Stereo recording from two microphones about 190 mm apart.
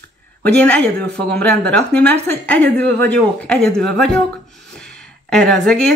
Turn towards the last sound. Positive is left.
turn(degrees=5)  # may be behind; listen again after turning